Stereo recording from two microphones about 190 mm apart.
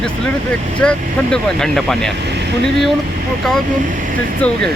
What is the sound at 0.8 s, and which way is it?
Speech, 5° left (ahead or behind).